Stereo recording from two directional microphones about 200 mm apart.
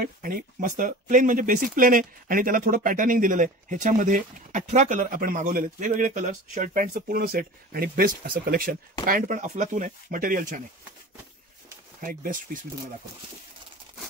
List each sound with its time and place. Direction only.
0.0 s speech: 45° right (ahead or behind)
12.0 s speech: 45° right (ahead or behind)